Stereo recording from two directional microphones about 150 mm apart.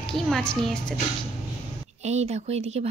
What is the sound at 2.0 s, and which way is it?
Speech, 45° right (ahead or behind).